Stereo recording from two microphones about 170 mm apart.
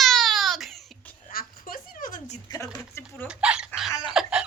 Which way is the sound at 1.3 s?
55° left (ahead or behind).